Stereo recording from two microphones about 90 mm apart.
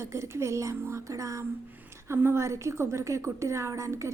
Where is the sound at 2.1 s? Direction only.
25° right (ahead or behind).